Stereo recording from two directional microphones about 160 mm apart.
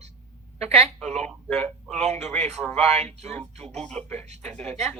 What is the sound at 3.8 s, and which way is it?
Speech, 5° left (ahead or behind).